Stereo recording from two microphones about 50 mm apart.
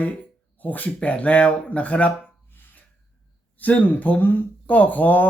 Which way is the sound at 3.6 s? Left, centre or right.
Left.